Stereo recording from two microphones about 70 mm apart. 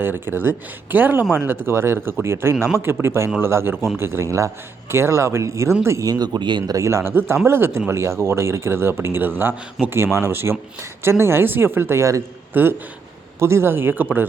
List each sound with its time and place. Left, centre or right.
0.0 s a man's voice: right
6.1 s speech: right
6.7 s speech: right
7.0 s a man's voice: right
12.5 s a man's voice: right